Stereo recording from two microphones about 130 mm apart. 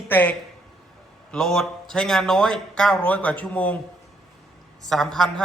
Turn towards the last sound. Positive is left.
turn(degrees=5)  # may be behind; listen again after turning